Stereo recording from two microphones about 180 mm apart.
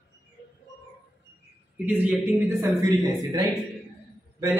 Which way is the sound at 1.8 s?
10° right (ahead or behind).